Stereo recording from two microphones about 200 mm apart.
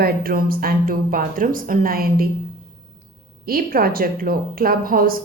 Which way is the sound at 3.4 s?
45° right (ahead or behind).